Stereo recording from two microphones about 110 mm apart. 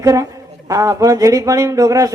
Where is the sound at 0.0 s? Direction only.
30° right (ahead or behind).